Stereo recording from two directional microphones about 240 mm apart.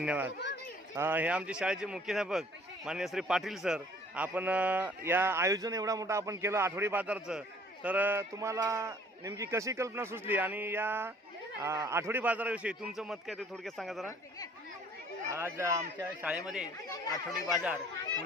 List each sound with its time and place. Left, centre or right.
0.0 s speech: centre
0.3 s speech: left
0.9 s a man's voice: centre
15.3 s a man's voice: centre
17.3 s a man's voice: centre